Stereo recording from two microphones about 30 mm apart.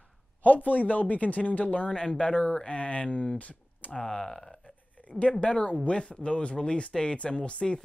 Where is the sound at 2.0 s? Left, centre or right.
Left.